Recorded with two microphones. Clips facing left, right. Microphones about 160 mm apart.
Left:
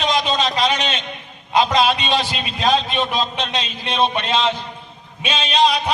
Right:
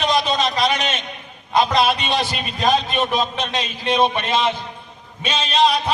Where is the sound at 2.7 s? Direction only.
10° right (ahead or behind).